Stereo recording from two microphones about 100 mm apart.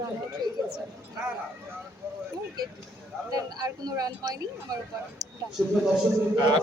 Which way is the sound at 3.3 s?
35° right (ahead or behind).